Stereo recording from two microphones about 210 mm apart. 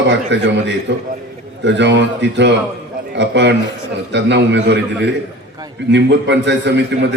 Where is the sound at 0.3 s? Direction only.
60° right (ahead or behind).